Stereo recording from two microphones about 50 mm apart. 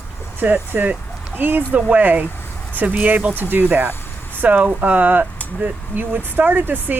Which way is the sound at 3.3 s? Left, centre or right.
Right.